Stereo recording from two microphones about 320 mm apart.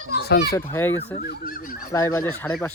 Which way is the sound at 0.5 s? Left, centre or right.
Centre.